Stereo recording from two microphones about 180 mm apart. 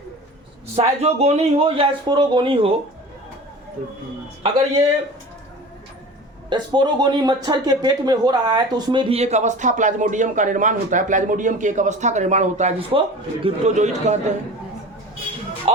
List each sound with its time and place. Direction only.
0.8 s speech: 35° right (ahead or behind)
6.5 s speech: 25° right (ahead or behind); by 14.3 s 40° right (ahead or behind)